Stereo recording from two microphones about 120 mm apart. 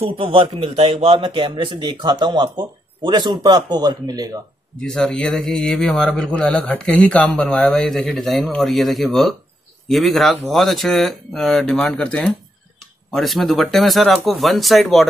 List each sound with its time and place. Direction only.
0.0 s speech: 50° right (ahead or behind); by 4.4 s 30° right (ahead or behind)
4.7 s speech: 5° left (ahead or behind)